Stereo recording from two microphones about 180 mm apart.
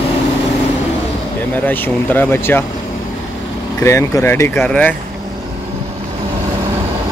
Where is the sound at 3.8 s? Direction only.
15° left (ahead or behind).